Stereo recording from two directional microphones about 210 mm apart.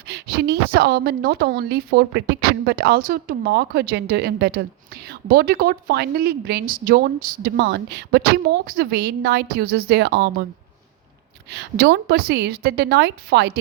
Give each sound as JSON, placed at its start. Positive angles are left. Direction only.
{"t": 0.1, "sound": "a woman's voice", "side_deg": -50}
{"t": 11.5, "sound": "a woman's voice", "side_deg": -55}